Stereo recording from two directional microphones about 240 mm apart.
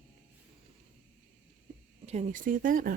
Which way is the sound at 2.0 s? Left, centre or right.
Right.